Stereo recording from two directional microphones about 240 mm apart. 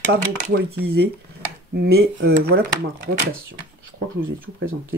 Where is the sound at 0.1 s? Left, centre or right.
Right.